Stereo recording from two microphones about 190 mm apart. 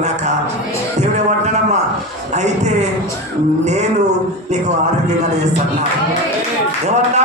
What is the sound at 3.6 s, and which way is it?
Music, 35° right (ahead or behind).